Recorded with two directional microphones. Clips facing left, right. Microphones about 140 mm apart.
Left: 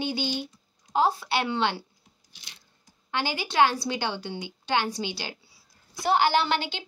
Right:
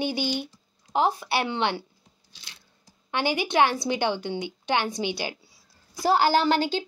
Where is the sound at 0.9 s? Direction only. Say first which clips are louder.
Even; 20° right (ahead or behind).